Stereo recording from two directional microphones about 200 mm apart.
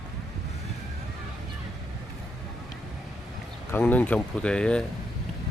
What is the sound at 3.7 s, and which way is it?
Speech, 10° left (ahead or behind).